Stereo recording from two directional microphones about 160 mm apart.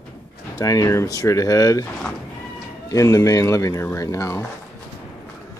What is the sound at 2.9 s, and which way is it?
Speech, 20° left (ahead or behind).